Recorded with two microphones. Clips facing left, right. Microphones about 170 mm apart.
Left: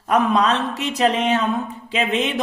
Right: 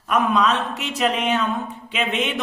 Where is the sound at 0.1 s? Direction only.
35° left (ahead or behind).